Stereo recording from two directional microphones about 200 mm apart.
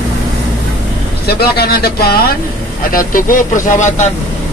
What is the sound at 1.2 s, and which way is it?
Speech, 50° left (ahead or behind).